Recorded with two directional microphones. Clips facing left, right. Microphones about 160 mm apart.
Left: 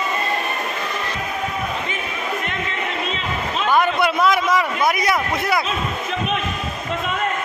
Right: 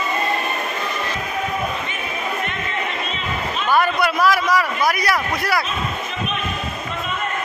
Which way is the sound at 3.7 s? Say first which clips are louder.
Even; 20° left (ahead or behind).